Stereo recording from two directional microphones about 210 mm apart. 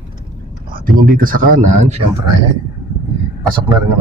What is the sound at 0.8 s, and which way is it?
Speech, 40° right (ahead or behind).